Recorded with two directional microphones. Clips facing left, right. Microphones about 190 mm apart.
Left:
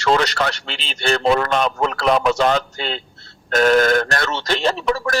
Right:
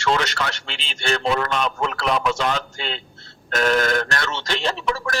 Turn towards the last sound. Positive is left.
turn(degrees=40)  # may be behind; listen again after turning